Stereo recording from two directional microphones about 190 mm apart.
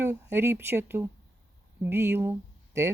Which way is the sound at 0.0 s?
10° right (ahead or behind).